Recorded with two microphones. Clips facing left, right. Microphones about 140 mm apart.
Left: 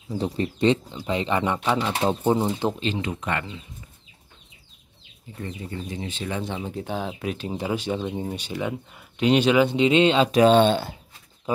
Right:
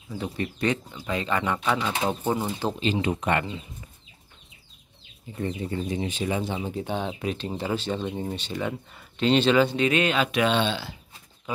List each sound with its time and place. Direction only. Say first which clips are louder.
0.2 s speech: left 5 dB; 25° left (ahead or behind)
3.0 s speech: right 3 dB; 25° right (ahead or behind)
5.4 s speech: right 4 dB; 20° right (ahead or behind)
6.4 s speech: right 1 dB; centre (ahead or behind); by 11.0 s 50° left (ahead or behind)